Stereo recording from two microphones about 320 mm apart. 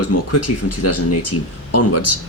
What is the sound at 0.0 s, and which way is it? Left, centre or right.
Speech, left.